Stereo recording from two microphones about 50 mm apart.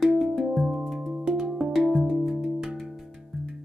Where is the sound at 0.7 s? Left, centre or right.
Centre.